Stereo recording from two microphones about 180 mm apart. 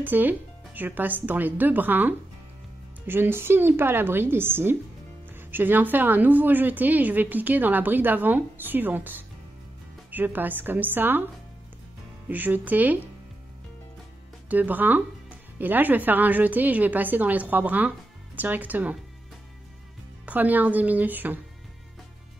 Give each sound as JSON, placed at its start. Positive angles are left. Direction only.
{"t": 0.0, "sound": "speech", "side_deg": -10}
{"t": 12.3, "sound": "speech", "side_deg": -10}
{"t": 14.5, "sound": "speech", "side_deg": -10}
{"t": 20.2, "sound": "speech", "side_deg": -10}